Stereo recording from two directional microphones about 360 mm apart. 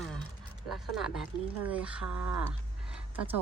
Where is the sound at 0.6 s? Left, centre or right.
Centre.